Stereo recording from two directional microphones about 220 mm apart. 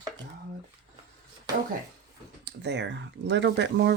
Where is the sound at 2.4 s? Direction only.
50° right (ahead or behind).